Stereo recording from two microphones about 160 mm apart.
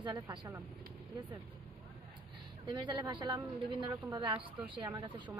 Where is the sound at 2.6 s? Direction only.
25° right (ahead or behind).